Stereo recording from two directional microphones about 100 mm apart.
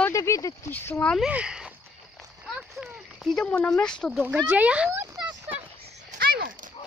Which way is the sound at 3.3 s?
10° left (ahead or behind).